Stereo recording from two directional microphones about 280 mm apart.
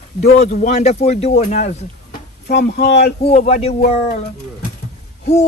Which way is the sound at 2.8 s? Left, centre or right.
Left.